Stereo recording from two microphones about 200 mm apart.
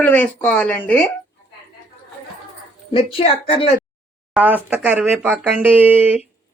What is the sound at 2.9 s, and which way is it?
Speech, 25° left (ahead or behind).